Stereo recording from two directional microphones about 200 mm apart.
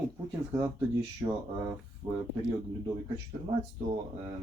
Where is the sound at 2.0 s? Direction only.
30° right (ahead or behind).